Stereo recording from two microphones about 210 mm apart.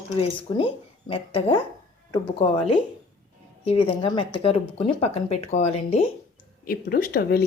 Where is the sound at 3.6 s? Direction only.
25° left (ahead or behind).